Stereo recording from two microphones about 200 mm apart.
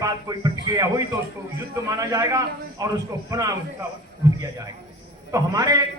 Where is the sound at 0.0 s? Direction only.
15° right (ahead or behind).